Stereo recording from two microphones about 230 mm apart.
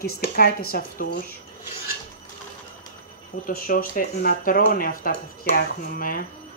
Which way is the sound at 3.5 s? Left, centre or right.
Left.